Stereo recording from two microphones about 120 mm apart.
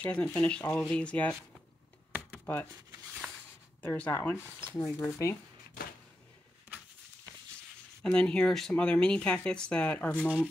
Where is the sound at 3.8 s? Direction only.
15° left (ahead or behind).